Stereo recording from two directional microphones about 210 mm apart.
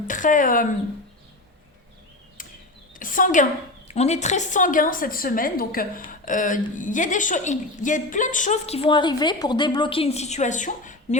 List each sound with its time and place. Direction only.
0.1 s a woman's voice: 40° left (ahead or behind)
2.4 s a sound: 40° left (ahead or behind)
3.0 s a woman's voice: 40° left (ahead or behind)